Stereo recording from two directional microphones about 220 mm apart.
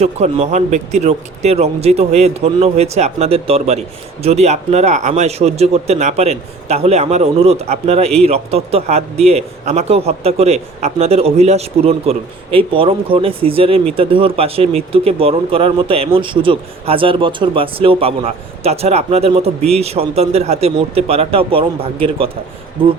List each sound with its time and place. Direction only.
0.0 s speech: 30° right (ahead or behind)